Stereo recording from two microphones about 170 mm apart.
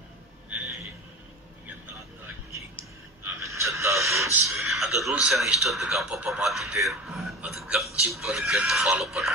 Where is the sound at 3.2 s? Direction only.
15° right (ahead or behind).